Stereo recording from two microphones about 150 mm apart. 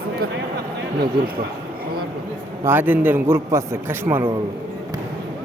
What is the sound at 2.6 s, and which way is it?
A man's voice, 15° right (ahead or behind).